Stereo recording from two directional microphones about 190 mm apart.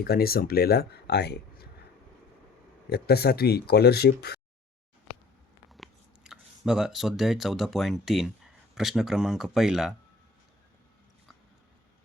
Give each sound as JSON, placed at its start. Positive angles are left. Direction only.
{"t": 0.0, "sound": "speech", "side_deg": 55}
{"t": 2.9, "sound": "speech", "side_deg": 55}
{"t": 5.7, "sound": "speech", "side_deg": 0}